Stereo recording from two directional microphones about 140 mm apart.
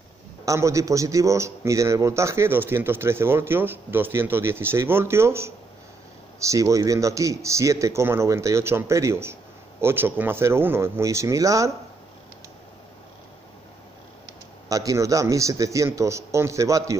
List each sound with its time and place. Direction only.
0.5 s a man's voice: 20° right (ahead or behind)
14.7 s speech: 25° right (ahead or behind)